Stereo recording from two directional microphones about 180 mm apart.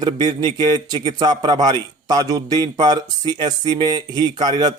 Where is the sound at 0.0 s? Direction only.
20° right (ahead or behind).